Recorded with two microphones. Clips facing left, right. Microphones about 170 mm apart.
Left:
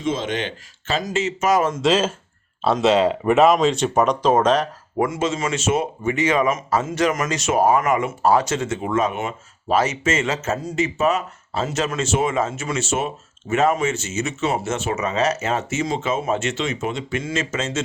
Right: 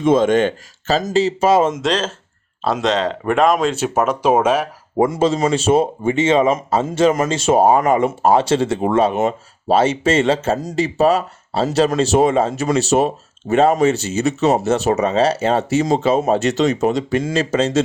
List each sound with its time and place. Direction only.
0.0 s speech: 50° right (ahead or behind); by 1.8 s 25° right (ahead or behind)
1.8 s speech: 5° left (ahead or behind); by 4.7 s 10° right (ahead or behind)
4.9 s speech: 35° right (ahead or behind)